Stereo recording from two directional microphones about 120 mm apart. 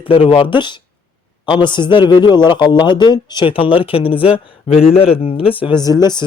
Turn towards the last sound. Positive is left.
turn(degrees=35)  # may be behind; listen again after turning